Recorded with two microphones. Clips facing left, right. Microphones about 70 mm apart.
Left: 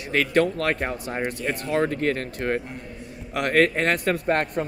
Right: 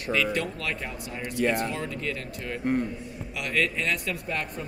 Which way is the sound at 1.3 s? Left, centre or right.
Right.